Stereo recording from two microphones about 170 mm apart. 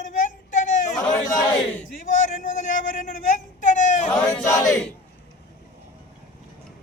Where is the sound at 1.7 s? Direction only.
50° left (ahead or behind).